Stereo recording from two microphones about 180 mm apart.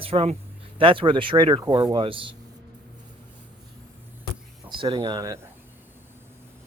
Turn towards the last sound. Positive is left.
turn(degrees=-20)  # may be behind; listen again after turning